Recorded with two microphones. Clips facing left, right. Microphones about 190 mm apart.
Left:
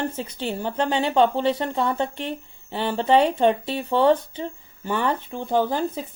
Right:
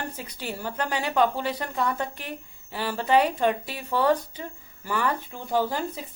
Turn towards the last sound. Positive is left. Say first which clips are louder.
# left 4 dB
turn(degrees=20)  # may be behind; listen again after turning